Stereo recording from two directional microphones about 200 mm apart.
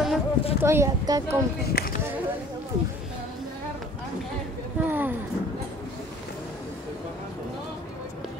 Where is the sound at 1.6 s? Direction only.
50° left (ahead or behind).